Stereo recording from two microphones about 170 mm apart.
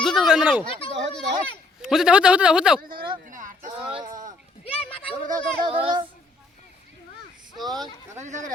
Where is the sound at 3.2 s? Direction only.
50° right (ahead or behind).